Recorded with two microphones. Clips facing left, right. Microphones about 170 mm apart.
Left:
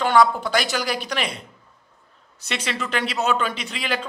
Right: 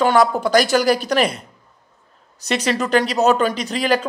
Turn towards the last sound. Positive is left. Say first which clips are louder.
# right 9 dB
turn(degrees=-40)  # may be behind; listen again after turning